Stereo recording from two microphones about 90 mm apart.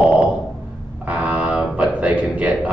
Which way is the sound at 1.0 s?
15° right (ahead or behind).